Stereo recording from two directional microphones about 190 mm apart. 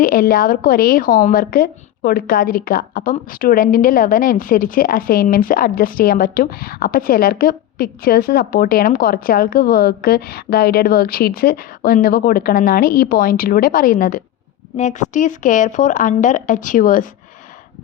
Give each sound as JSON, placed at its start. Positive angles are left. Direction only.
{"t": 0.0, "sound": "speech", "side_deg": 50}